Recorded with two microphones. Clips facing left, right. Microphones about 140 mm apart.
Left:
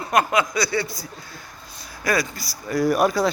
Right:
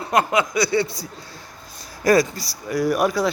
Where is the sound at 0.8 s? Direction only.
65° right (ahead or behind).